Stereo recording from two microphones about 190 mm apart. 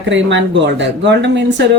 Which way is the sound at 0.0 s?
75° right (ahead or behind).